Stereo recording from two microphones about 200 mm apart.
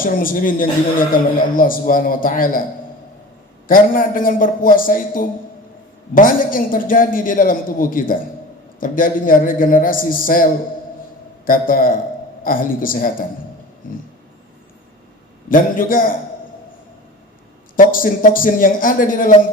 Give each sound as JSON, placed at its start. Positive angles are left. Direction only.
{"t": 0.0, "sound": "speech", "side_deg": 45}
{"t": 3.7, "sound": "speech", "side_deg": 45}
{"t": 15.4, "sound": "speech", "side_deg": 45}
{"t": 17.7, "sound": "speech", "side_deg": 45}